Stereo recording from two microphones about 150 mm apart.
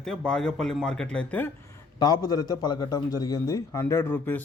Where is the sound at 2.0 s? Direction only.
25° left (ahead or behind).